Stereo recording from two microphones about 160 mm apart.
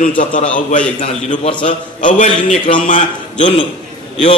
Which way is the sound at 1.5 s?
30° left (ahead or behind).